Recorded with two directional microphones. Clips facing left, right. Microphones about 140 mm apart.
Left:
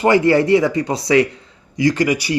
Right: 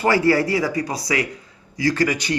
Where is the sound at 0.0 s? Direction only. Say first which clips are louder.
Left 4 dB; 20° left (ahead or behind).